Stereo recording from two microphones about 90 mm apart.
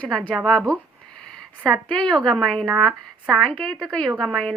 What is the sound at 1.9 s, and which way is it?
A woman's voice, 5° left (ahead or behind).